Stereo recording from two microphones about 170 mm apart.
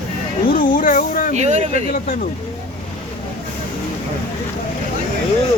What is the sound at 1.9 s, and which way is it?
Speech, 55° left (ahead or behind).